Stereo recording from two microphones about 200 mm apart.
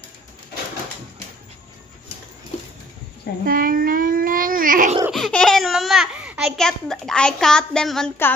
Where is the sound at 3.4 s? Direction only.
45° right (ahead or behind).